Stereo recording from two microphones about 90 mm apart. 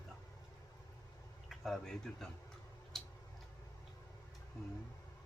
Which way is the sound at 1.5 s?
Centre (ahead or behind).